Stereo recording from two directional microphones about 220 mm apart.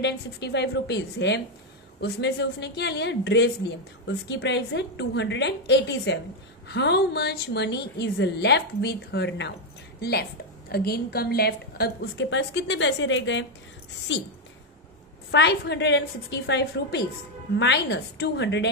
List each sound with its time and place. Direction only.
0.0 s a woman's voice: 50° left (ahead or behind)
15.3 s a woman's voice: 50° left (ahead or behind)